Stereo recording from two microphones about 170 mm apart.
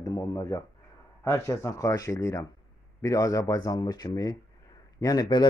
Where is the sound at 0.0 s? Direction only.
20° left (ahead or behind).